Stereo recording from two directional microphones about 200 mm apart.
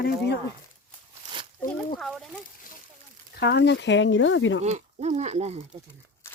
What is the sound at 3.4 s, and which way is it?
Speech, 60° left (ahead or behind).